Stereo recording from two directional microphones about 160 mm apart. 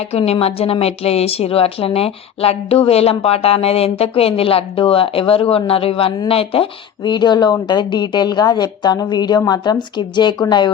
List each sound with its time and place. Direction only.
0.1 s a woman's voice: 40° left (ahead or behind)